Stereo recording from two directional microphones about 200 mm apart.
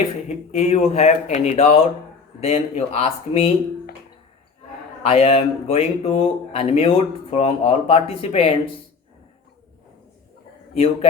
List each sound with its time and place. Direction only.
0.3 s speech: 35° left (ahead or behind)
5.0 s speech: 30° left (ahead or behind)